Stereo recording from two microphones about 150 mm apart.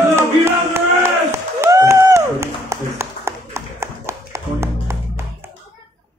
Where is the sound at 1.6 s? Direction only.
20° right (ahead or behind).